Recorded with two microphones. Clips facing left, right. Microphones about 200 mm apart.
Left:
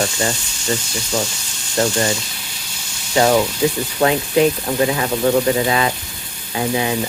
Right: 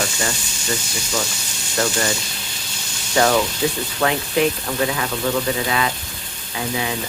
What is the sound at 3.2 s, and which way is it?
Speech, 15° left (ahead or behind).